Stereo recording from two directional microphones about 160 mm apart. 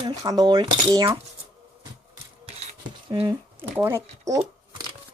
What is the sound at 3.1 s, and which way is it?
Speech, 30° right (ahead or behind).